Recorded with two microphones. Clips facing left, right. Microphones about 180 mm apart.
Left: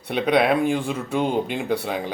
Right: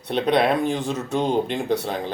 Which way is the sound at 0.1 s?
5° left (ahead or behind).